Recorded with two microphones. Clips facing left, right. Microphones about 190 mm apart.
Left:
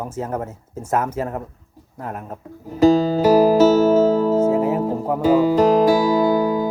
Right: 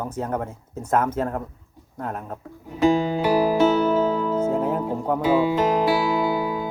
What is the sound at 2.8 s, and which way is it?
Music, 40° left (ahead or behind).